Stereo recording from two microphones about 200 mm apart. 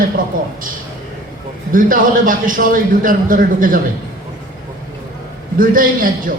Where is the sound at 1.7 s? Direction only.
45° right (ahead or behind).